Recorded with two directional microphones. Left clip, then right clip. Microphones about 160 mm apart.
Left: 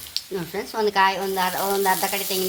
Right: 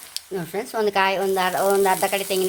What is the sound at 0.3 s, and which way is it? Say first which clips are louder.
Speech: right 2 dB; 40° right (ahead or behind).